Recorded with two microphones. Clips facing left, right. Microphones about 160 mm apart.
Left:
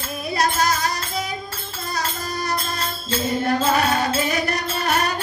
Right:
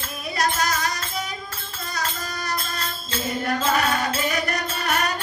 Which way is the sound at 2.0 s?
30° left (ahead or behind).